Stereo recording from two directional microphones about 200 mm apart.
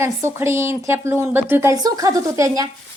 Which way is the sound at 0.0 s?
15° right (ahead or behind).